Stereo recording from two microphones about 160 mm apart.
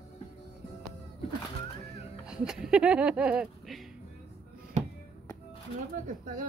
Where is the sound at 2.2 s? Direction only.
5° right (ahead or behind).